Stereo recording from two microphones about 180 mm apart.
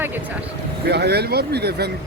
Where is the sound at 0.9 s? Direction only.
65° right (ahead or behind).